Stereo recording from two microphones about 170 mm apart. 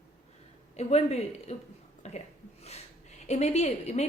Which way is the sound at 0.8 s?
40° left (ahead or behind).